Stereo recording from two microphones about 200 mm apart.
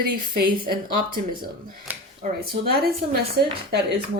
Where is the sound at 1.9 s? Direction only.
10° right (ahead or behind).